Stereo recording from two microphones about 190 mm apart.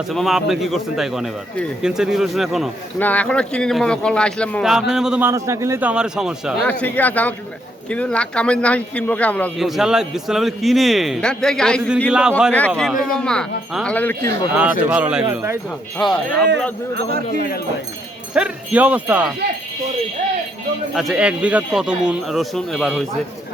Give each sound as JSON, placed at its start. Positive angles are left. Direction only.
{"t": 0.1, "sound": "speech", "side_deg": 0}
{"t": 5.3, "sound": "a man's voice", "side_deg": -15}
{"t": 6.7, "sound": "a man's voice", "side_deg": 10}
{"t": 14.5, "sound": "a man's voice", "side_deg": -5}
{"t": 16.0, "sound": "speech", "side_deg": 0}
{"t": 16.9, "sound": "speech", "side_deg": -55}
{"t": 18.3, "sound": "a man's voice", "side_deg": -5}
{"t": 20.9, "sound": "speech", "side_deg": 0}